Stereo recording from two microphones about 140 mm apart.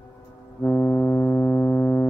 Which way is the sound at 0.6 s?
10° left (ahead or behind).